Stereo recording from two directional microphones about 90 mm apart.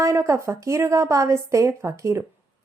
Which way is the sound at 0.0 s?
35° right (ahead or behind).